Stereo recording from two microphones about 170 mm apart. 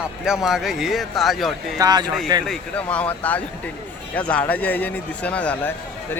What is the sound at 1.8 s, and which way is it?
Speech, 25° right (ahead or behind).